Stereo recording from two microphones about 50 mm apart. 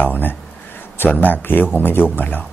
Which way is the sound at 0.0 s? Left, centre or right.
Left.